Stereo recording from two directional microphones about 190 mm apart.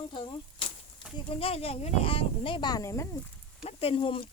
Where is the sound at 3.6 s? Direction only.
30° left (ahead or behind).